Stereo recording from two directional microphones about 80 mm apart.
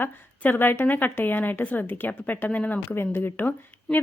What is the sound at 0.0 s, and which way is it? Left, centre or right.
A woman's voice, left.